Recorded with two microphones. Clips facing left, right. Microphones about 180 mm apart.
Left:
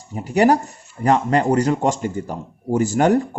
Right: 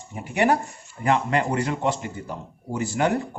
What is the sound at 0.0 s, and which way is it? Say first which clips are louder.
Speech: left 6 dB; 35° left (ahead or behind).